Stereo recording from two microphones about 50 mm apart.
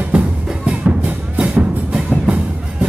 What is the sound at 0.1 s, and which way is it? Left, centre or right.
Music, right.